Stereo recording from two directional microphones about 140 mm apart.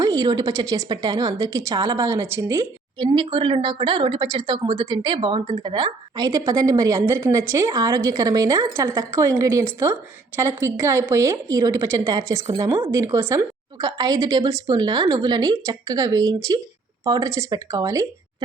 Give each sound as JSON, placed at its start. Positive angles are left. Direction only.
{"t": 0.0, "sound": "a woman's voice", "side_deg": -25}
{"t": 3.0, "sound": "a woman's voice", "side_deg": -35}